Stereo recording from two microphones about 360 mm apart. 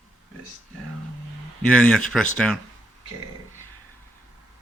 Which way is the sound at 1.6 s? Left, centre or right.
Centre.